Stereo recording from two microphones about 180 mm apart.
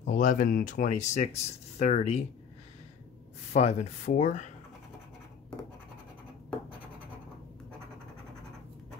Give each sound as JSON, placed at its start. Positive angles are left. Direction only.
{"t": 0.0, "sound": "speech", "side_deg": 45}
{"t": 3.5, "sound": "speech", "side_deg": 40}